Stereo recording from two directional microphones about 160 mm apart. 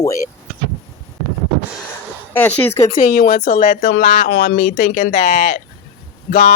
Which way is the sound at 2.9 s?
60° left (ahead or behind).